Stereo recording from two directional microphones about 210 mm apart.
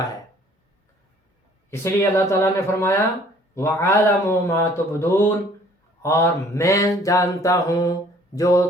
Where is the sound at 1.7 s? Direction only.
10° left (ahead or behind).